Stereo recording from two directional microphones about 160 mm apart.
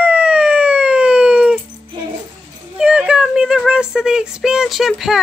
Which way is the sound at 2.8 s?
5° right (ahead or behind).